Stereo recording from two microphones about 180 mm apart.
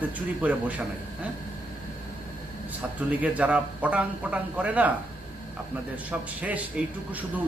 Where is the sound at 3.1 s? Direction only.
10° right (ahead or behind).